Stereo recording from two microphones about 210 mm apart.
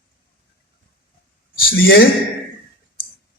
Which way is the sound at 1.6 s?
45° left (ahead or behind).